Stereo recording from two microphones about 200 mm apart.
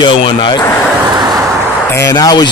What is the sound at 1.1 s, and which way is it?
Vehicle, 20° right (ahead or behind).